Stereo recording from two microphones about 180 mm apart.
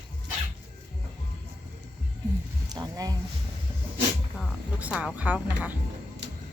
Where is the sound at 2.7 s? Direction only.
20° right (ahead or behind).